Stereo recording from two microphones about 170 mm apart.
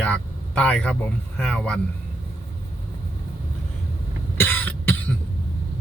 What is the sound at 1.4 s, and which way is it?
Speech, 5° left (ahead or behind).